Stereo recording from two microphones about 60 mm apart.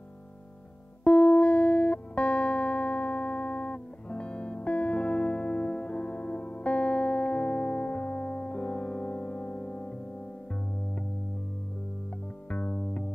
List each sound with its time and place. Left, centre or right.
1.0 s music: centre
12.4 s music: left